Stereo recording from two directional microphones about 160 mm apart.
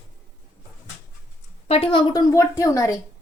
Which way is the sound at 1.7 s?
35° left (ahead or behind).